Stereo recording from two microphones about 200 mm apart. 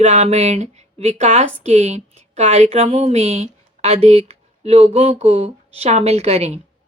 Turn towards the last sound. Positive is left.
turn(degrees=-30)  # may be behind; listen again after turning